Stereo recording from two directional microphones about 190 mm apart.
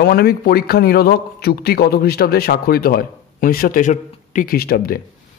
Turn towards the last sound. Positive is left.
turn(degrees=50)  # may be behind; listen again after turning